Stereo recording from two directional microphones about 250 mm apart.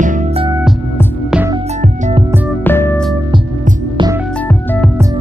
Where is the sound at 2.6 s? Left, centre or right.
Centre.